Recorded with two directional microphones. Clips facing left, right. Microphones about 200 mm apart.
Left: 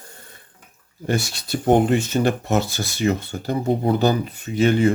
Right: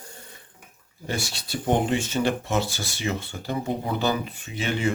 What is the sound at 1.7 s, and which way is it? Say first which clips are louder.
Speech: left 6 dB; 50° left (ahead or behind).